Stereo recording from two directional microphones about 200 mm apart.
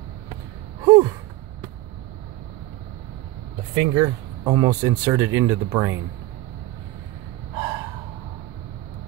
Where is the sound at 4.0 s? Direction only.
15° right (ahead or behind).